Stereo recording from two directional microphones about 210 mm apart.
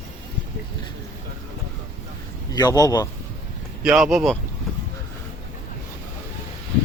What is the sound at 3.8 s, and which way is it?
Speech, 5° right (ahead or behind).